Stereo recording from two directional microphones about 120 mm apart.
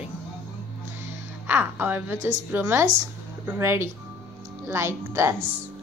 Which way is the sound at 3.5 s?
20° right (ahead or behind).